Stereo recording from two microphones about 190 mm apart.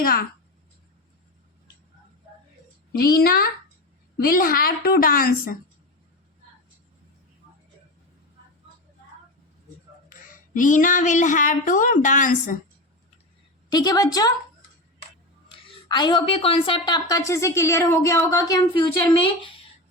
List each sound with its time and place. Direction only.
0.0 s a woman's voice: 50° left (ahead or behind)
2.9 s a woman's voice: 55° left (ahead or behind)
10.1 s a sound: 45° left (ahead or behind)
13.7 s a woman's voice: 20° left (ahead or behind)
15.5 s a woman's voice: 25° left (ahead or behind)